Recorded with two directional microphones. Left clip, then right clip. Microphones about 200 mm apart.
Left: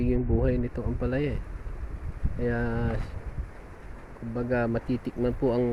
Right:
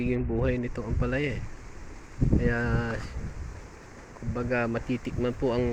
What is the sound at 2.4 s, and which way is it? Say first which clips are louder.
Speech: left 2 dB; 15° left (ahead or behind).